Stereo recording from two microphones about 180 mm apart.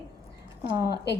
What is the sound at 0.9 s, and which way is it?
Speech, 65° left (ahead or behind).